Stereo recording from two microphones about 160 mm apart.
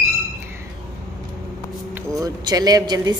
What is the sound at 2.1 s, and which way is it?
Speech, 25° right (ahead or behind).